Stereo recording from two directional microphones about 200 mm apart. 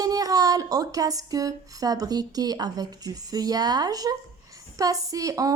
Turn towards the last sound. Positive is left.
turn(degrees=-15)  # may be behind; listen again after turning